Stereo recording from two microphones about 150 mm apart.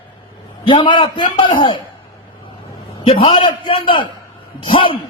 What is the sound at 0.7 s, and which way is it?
A man's voice, 30° left (ahead or behind).